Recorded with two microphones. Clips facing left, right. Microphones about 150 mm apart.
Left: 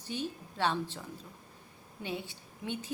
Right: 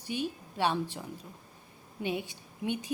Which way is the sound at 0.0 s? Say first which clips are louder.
Right 3 dB; 15° right (ahead or behind).